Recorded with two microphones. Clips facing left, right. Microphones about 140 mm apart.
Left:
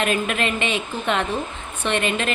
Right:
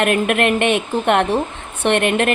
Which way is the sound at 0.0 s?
60° right (ahead or behind).